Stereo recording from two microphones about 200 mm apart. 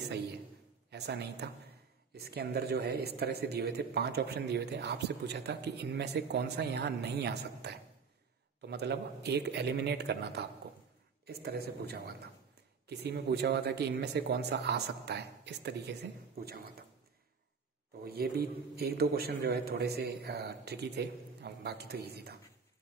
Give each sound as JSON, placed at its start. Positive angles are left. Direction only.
{"t": 0.8, "sound": "a man's voice", "side_deg": -55}
{"t": 18.0, "sound": "a man's voice", "side_deg": -50}